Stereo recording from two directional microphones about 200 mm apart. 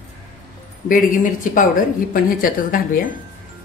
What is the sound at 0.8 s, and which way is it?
Speech, 40° left (ahead or behind).